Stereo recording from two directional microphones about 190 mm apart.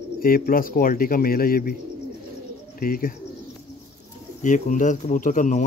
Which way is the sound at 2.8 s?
50° left (ahead or behind).